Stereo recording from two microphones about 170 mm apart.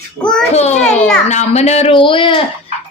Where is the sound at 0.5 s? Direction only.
40° left (ahead or behind).